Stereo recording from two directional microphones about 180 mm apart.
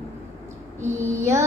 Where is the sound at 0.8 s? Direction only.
15° right (ahead or behind).